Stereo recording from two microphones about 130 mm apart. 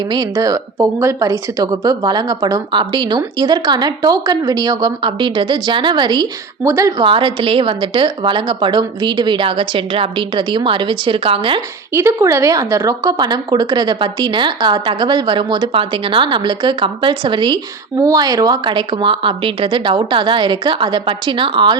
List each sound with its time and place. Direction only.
0.1 s a woman's voice: 30° right (ahead or behind)
7.0 s a woman's voice: 40° right (ahead or behind)
11.9 s a woman's voice: 20° right (ahead or behind); by 21.8 s 40° right (ahead or behind)